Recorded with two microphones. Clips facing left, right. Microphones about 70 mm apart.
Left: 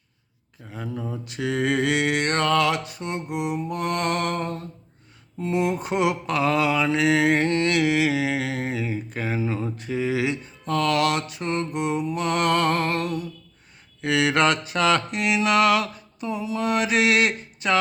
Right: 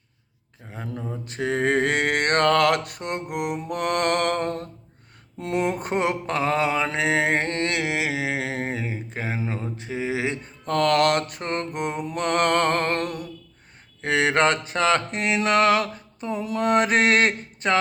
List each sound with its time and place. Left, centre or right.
1.1 s mantra: right
5.4 s speech: right
5.8 s mantra: right
10.4 s mantra: right
14.0 s mantra: right